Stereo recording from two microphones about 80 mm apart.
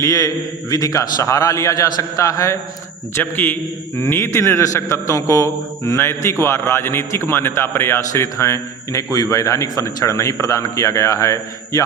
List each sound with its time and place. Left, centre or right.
0.0 s a man's voice: left
3.2 s a man's voice: left